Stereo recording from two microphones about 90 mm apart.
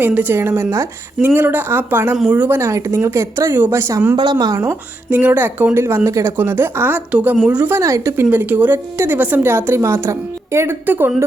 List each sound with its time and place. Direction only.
0.0 s a woman's voice: 20° right (ahead or behind)
2.6 s speech: 35° right (ahead or behind)
4.2 s speech: 50° right (ahead or behind)
5.0 s a woman's voice: 15° right (ahead or behind)
7.7 s a woman's voice: 35° right (ahead or behind)